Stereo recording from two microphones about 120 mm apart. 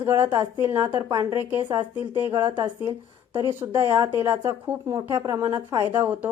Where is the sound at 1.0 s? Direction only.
40° right (ahead or behind).